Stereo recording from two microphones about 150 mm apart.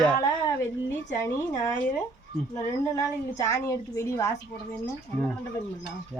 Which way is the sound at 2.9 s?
20° left (ahead or behind).